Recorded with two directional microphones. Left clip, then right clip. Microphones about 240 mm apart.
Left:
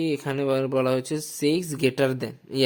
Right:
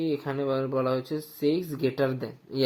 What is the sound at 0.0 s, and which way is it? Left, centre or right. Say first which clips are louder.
Speech: left 3 dB; left.